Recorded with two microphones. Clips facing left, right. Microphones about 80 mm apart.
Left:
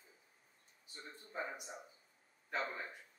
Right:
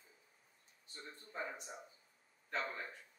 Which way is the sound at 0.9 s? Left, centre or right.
Centre.